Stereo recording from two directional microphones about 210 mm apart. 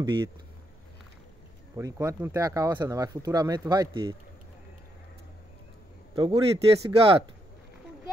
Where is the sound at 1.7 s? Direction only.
15° right (ahead or behind).